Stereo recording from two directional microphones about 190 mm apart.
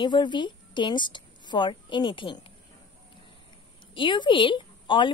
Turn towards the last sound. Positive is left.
turn(degrees=25)  # may be behind; listen again after turning